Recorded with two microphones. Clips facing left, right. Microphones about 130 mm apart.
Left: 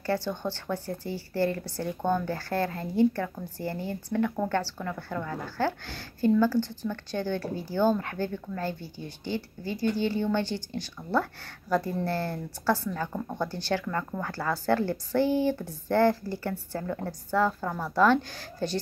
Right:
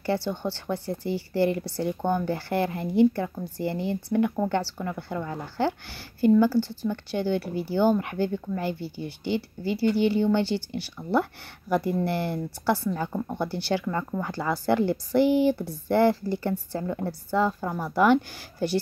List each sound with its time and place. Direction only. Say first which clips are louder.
0.0 s speech: right 2 dB; 15° right (ahead or behind)